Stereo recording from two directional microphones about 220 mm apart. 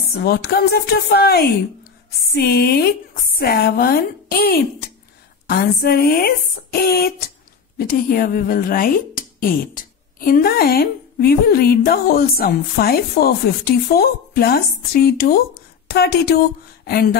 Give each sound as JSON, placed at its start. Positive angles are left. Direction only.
{"t": 0.2, "sound": "speech", "side_deg": 45}